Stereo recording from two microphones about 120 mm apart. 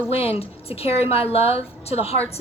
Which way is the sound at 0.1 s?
55° left (ahead or behind).